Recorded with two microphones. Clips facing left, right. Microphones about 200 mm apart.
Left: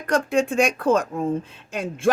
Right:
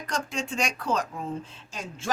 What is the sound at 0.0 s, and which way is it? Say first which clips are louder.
A man's voice: left 11 dB; 55° left (ahead or behind).